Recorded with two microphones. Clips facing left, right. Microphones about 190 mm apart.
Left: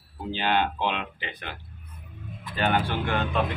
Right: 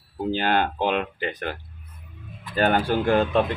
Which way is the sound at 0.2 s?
45° right (ahead or behind).